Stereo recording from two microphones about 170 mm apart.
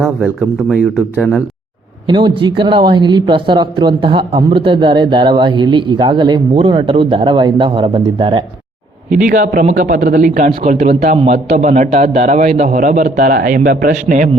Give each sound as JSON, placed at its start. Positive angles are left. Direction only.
{"t": 0.7, "sound": "speech", "side_deg": 0}
{"t": 2.0, "sound": "speech", "side_deg": -30}
{"t": 9.1, "sound": "a man's voice", "side_deg": -50}